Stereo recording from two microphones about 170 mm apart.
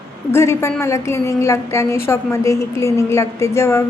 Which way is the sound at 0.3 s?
15° left (ahead or behind).